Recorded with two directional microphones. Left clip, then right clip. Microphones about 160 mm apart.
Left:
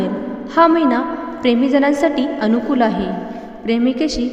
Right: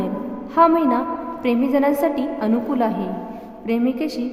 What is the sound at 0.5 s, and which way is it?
A woman's voice, 15° left (ahead or behind).